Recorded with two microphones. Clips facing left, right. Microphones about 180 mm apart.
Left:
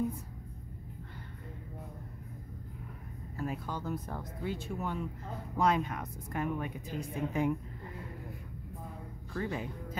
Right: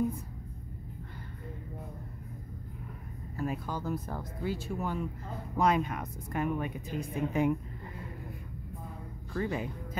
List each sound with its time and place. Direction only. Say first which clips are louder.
3.3 s a woman's voice: right 3 dB; 10° right (ahead or behind)
9.3 s a woman's voice: right 3 dB; 10° right (ahead or behind)